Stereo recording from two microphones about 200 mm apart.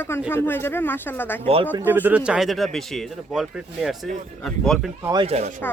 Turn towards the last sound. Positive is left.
turn(degrees=-35)  # may be behind; listen again after turning